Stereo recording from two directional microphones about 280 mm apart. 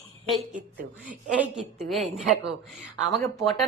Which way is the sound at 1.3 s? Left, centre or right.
Centre.